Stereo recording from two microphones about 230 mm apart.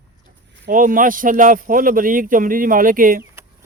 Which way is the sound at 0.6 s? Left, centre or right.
Right.